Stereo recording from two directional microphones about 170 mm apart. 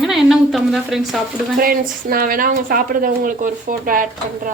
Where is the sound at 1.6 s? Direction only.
60° right (ahead or behind).